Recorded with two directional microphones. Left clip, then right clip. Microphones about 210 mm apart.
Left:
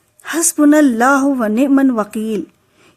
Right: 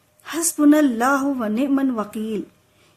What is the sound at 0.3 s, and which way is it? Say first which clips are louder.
Speech: left 5 dB; 35° left (ahead or behind).